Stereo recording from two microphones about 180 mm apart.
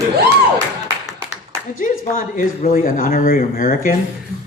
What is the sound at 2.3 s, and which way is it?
Speech, 50° left (ahead or behind).